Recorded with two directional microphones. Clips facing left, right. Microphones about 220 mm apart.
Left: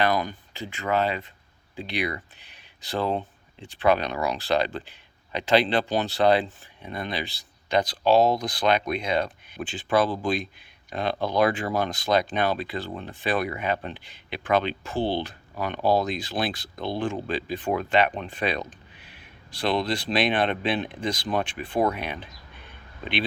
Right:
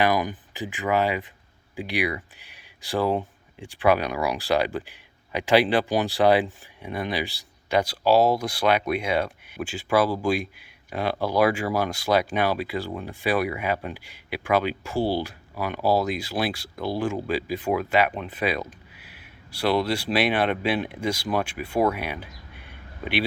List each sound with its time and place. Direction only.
0.0 s speech: 15° right (ahead or behind)